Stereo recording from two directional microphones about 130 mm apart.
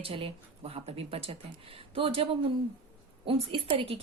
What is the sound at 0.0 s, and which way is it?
A woman's voice, 45° right (ahead or behind).